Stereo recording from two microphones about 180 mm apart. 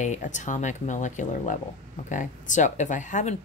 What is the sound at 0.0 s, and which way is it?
Speech, 40° left (ahead or behind).